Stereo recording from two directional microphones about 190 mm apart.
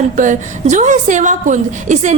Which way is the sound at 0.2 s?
40° right (ahead or behind).